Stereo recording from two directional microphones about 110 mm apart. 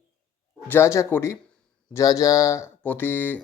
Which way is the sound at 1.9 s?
30° left (ahead or behind).